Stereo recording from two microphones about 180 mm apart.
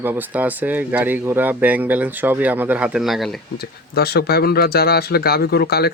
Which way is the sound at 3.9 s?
60° left (ahead or behind).